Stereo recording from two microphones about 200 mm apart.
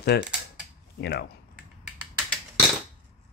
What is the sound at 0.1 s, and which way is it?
Speech, 55° left (ahead or behind).